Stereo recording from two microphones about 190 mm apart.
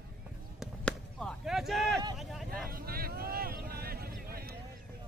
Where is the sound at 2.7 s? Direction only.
50° right (ahead or behind).